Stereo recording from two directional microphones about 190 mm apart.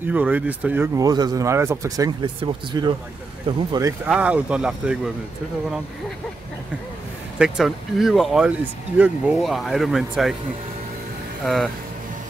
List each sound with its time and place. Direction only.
0.0 s speech: 10° right (ahead or behind)
0.9 s speech: 20° right (ahead or behind)
4.0 s speech: 5° right (ahead or behind)
7.3 s speech: 5° right (ahead or behind)
11.4 s speech: centre (ahead or behind)